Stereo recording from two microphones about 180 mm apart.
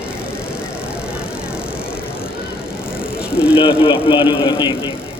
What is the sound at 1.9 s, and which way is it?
Bicycle, 10° left (ahead or behind).